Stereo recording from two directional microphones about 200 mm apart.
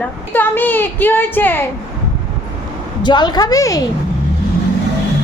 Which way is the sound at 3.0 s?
20° left (ahead or behind).